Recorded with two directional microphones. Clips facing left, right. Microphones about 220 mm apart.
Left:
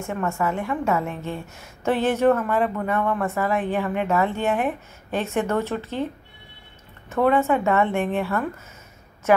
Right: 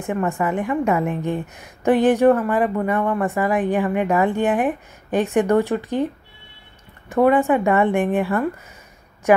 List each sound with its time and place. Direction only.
0.0 s a woman's voice: 15° right (ahead or behind)
7.1 s a woman's voice: 15° right (ahead or behind)